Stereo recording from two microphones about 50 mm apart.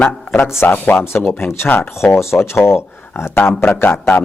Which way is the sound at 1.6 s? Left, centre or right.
Left.